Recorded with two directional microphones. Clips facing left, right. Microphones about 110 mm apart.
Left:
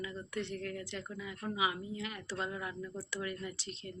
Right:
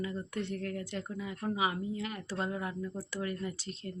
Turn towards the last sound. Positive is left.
turn(degrees=-40)  # may be behind; listen again after turning